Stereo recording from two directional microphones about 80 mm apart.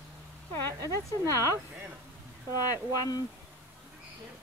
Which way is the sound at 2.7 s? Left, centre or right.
Left.